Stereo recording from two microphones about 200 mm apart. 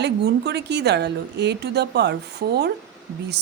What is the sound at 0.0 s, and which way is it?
A woman's voice, 55° right (ahead or behind).